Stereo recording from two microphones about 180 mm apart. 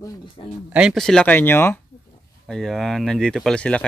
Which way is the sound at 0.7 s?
Centre (ahead or behind).